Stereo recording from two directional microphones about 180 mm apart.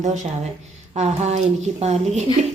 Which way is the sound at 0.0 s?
40° right (ahead or behind).